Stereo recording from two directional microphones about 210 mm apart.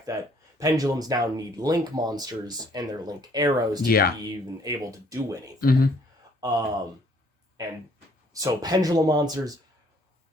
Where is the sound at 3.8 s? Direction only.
45° left (ahead or behind).